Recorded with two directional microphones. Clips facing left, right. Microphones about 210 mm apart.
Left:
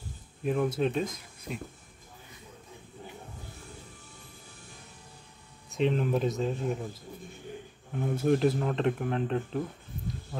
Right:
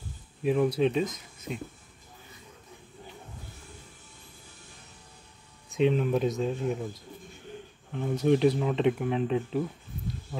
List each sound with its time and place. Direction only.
0.4 s speech: 5° right (ahead or behind)
5.7 s speech: centre (ahead or behind)
7.9 s speech: 5° left (ahead or behind)